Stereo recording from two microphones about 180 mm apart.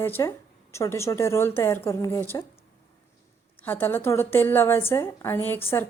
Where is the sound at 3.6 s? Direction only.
10° left (ahead or behind).